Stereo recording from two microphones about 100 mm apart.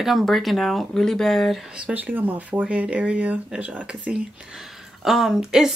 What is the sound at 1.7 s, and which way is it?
A woman's voice, 15° right (ahead or behind).